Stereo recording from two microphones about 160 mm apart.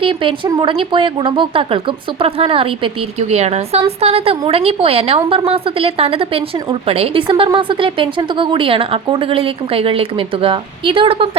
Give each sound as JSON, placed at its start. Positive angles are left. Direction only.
{"t": 0.0, "sound": "speech", "side_deg": -35}